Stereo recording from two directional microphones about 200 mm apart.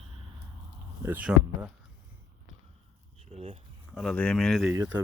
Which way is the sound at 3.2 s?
30° right (ahead or behind).